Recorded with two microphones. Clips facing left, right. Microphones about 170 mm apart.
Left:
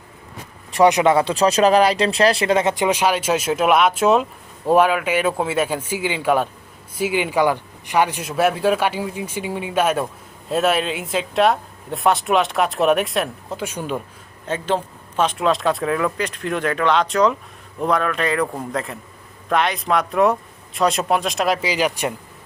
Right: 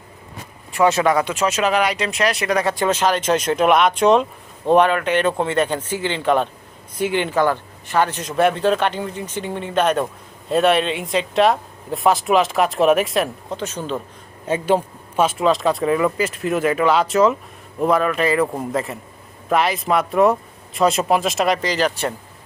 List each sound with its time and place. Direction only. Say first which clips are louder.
0.9 s speech: left 1 dB; 15° left (ahead or behind)
1.1 s speech: left 3 dB; 30° left (ahead or behind); by 14.0 s 10° left (ahead or behind)
14.4 s speech: right 4 dB; 10° right (ahead or behind); by 22.1 s 10° left (ahead or behind)